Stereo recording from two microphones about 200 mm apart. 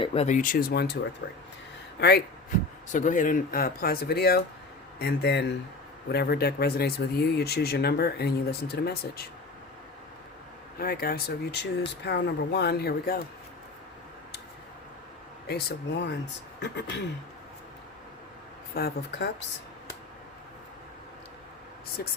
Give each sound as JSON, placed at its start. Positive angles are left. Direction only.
{"t": 0.0, "sound": "speech", "side_deg": 30}
{"t": 1.2, "sound": "speech", "side_deg": 60}
{"t": 2.9, "sound": "speech", "side_deg": 40}
{"t": 10.8, "sound": "speech", "side_deg": 50}
{"t": 15.4, "sound": "speech", "side_deg": 55}
{"t": 18.7, "sound": "speech", "side_deg": 50}
{"t": 22.0, "sound": "speech", "side_deg": 50}